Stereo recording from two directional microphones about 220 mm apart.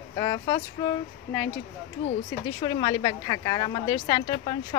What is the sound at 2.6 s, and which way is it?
A woman's voice, 20° left (ahead or behind).